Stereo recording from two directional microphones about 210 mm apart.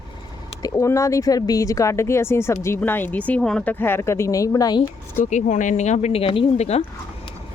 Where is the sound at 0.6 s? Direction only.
15° left (ahead or behind).